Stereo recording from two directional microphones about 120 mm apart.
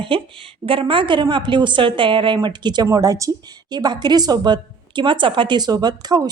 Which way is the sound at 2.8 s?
30° right (ahead or behind).